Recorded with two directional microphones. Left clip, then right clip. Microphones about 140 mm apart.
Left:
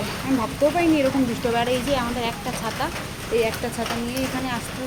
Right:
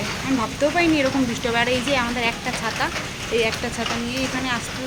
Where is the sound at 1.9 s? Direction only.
10° right (ahead or behind).